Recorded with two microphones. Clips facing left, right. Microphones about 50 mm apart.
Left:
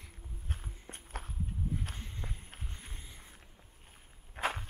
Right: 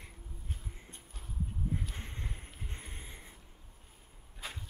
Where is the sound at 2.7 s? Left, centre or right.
Right.